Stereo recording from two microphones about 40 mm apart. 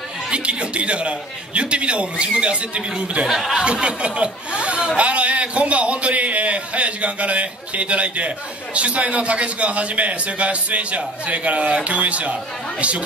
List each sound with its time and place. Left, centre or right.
0.3 s a man's voice: right
3.3 s speech: centre
3.5 s speech: right